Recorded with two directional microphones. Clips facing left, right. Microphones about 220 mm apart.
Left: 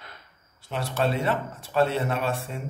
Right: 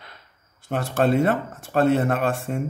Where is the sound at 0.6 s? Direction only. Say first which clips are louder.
Right 5 dB; 50° right (ahead or behind).